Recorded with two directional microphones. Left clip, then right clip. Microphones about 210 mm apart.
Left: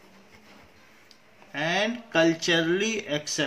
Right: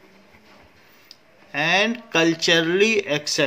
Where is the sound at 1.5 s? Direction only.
45° right (ahead or behind).